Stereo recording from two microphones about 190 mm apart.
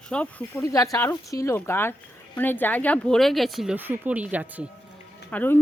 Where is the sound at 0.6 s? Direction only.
15° left (ahead or behind); by 4.7 s 10° right (ahead or behind).